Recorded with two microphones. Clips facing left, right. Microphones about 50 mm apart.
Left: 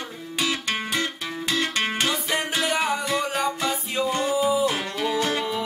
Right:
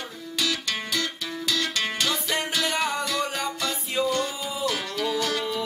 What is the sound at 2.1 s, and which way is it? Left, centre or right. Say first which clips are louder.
Music: left 2 dB; centre.